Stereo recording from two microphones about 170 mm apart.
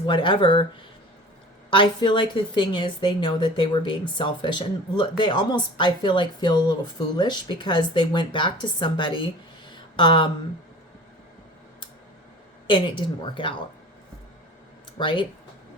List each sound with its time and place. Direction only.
0.0 s a woman's voice: 30° left (ahead or behind)
1.7 s a woman's voice: 30° left (ahead or behind)
12.6 s a woman's voice: 30° left (ahead or behind)
14.9 s a woman's voice: 30° left (ahead or behind)